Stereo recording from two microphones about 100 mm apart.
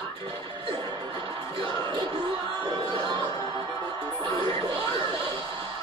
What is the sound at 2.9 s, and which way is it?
Music, 55° right (ahead or behind).